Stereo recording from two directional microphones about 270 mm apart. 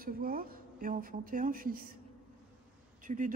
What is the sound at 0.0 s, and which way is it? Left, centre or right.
Speech, right.